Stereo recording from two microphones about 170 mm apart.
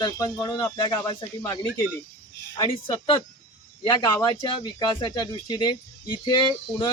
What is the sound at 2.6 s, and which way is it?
Speech, 25° left (ahead or behind).